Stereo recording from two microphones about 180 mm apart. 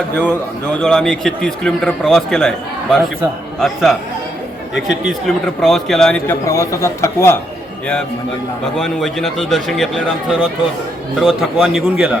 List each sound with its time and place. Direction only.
0.2 s a man's voice: 10° left (ahead or behind)
6.4 s speech: 20° left (ahead or behind)
8.8 s a man's voice: centre (ahead or behind)
11.2 s a man's voice: centre (ahead or behind)